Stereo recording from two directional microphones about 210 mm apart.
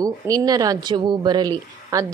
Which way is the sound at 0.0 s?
15° right (ahead or behind).